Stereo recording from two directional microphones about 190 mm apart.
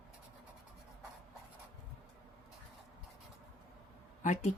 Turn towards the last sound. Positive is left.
turn(degrees=40)  # may be behind; listen again after turning